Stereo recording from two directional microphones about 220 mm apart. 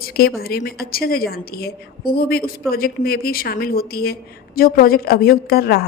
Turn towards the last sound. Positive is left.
turn(degrees=45)  # may be behind; listen again after turning